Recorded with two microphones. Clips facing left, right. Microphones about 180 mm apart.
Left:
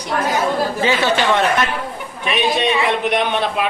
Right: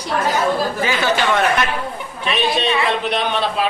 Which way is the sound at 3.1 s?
15° left (ahead or behind).